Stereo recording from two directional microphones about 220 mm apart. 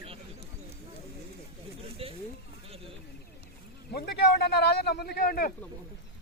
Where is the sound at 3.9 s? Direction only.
45° left (ahead or behind).